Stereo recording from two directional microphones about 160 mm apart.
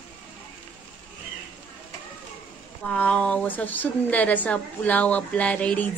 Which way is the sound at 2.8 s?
10° left (ahead or behind).